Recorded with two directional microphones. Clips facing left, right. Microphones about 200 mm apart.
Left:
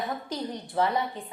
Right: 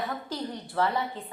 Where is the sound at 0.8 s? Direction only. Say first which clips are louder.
Left 1 dB; 20° left (ahead or behind).